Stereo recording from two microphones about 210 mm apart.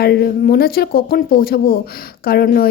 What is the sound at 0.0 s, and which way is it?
A woman's voice, 50° left (ahead or behind).